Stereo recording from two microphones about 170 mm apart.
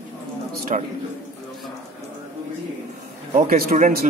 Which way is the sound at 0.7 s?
45° right (ahead or behind).